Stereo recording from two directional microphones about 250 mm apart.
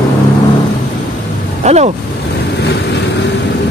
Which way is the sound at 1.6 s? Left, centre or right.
Right.